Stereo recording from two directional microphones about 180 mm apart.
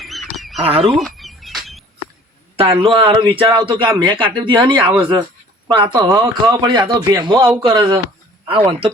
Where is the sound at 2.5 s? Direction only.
30° right (ahead or behind).